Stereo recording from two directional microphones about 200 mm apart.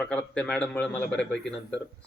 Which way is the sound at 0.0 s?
5° left (ahead or behind).